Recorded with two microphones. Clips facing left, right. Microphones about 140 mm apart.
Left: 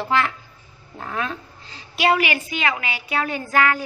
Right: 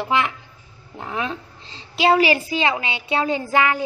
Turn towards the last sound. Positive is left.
turn(degrees=-20)  # may be behind; listen again after turning